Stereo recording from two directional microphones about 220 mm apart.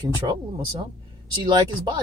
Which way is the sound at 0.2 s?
20° right (ahead or behind).